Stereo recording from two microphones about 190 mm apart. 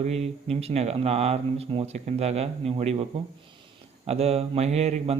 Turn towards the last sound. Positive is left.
turn(degrees=-35)  # may be behind; listen again after turning